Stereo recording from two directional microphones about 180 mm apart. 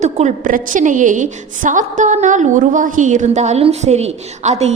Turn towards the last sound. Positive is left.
turn(degrees=-35)  # may be behind; listen again after turning